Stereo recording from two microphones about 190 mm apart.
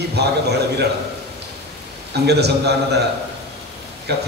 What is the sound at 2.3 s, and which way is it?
Speech, 60° right (ahead or behind).